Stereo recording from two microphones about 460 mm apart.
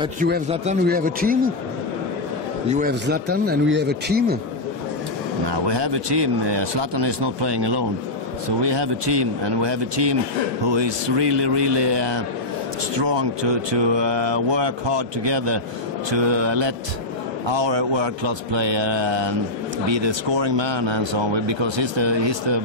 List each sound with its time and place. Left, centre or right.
0.0 s a man's voice: centre
2.7 s speech: centre
5.5 s speech: right